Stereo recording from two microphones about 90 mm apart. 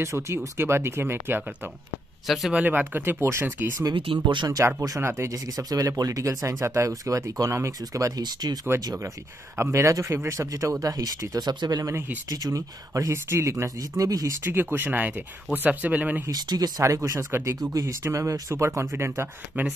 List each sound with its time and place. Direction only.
0.0 s speech: 30° right (ahead or behind)
2.2 s speech: centre (ahead or behind)
2.5 s speech: 20° right (ahead or behind)
3.9 s speech: 70° right (ahead or behind)
4.5 s speech: 30° right (ahead or behind); by 8.5 s 45° right (ahead or behind)
9.6 s speech: 30° right (ahead or behind)
14.4 s speech: 25° right (ahead or behind)
16.3 s speech: 50° right (ahead or behind)
16.8 s speech: 35° right (ahead or behind)